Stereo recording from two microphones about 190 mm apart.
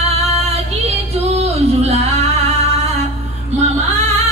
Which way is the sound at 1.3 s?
35° right (ahead or behind).